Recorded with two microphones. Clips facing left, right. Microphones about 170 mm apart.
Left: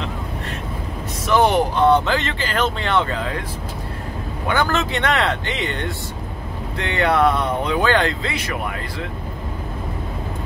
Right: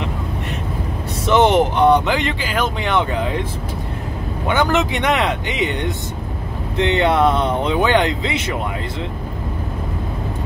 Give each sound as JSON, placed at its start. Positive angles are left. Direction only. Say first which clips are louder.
{"t": 1.2, "sound": "speech", "louder": "right 3 dB", "side_deg": -20}
{"t": 4.5, "sound": "speech", "louder": "right 3 dB", "side_deg": -20}